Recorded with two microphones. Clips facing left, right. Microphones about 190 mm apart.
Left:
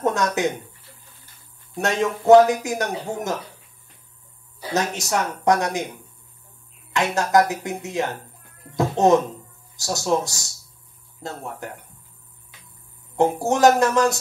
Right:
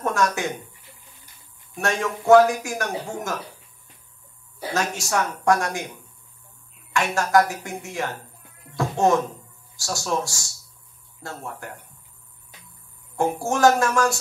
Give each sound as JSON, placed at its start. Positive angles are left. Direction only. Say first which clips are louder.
{"t": 0.0, "sound": "speech", "louder": "left 2 dB", "side_deg": 20}
{"t": 1.8, "sound": "speech", "louder": "left 3 dB", "side_deg": 20}
{"t": 4.7, "sound": "speech", "louder": "left 2 dB", "side_deg": 20}
{"t": 6.9, "sound": "speech", "louder": "left 1 dB", "side_deg": 20}
{"t": 13.1, "sound": "speech", "louder": "left 4 dB", "side_deg": 20}